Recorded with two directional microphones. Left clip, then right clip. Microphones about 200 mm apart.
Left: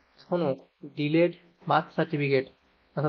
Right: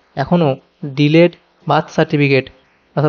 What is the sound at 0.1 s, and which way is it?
A man's voice, 40° right (ahead or behind).